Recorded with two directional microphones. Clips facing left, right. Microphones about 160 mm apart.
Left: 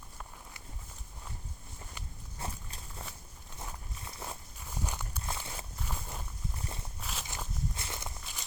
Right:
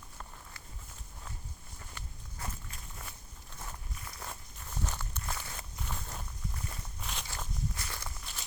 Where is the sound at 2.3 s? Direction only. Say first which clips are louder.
Left 2 dB; 25° left (ahead or behind).